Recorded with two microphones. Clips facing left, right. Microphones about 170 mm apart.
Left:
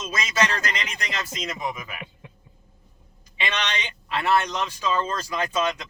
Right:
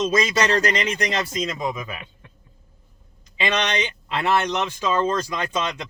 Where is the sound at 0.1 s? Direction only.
30° right (ahead or behind).